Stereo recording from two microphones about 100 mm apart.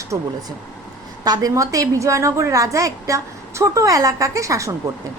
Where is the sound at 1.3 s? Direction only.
35° right (ahead or behind).